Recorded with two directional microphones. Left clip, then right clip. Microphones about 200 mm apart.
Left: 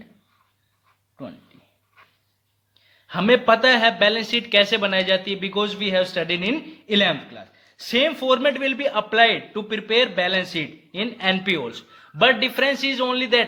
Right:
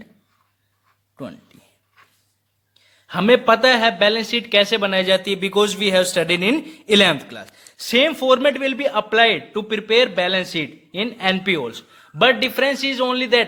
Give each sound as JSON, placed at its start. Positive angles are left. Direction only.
{"t": 2.7, "sound": "speech", "side_deg": -35}